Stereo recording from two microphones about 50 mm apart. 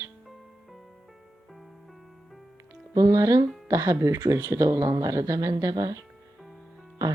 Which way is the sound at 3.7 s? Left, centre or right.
Right.